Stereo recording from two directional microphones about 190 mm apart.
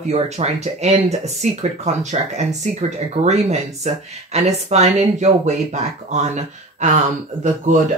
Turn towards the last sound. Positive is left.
turn(degrees=-40)  # may be behind; listen again after turning